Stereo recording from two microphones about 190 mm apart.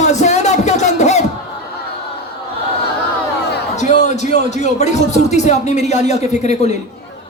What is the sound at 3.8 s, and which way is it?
Speech, 40° left (ahead or behind).